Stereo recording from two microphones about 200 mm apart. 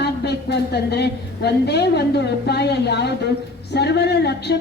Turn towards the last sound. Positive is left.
turn(degrees=55)  # may be behind; listen again after turning